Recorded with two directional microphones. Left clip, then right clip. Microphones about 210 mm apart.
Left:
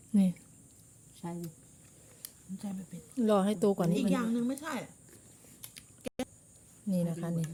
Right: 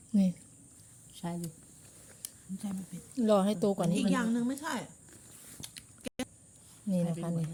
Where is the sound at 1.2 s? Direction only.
50° right (ahead or behind).